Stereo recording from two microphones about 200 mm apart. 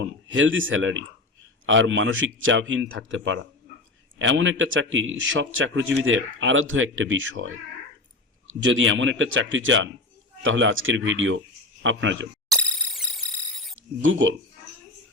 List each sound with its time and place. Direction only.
0.0 s a man's voice: 70° right (ahead or behind)
8.6 s a man's voice: 70° right (ahead or behind)
13.7 s speech: 75° right (ahead or behind)